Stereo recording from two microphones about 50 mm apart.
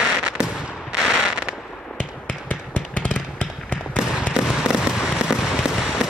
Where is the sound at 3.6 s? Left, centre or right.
Right.